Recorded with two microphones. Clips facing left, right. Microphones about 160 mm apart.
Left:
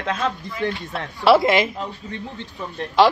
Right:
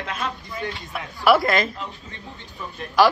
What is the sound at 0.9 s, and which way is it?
Speech, 25° left (ahead or behind).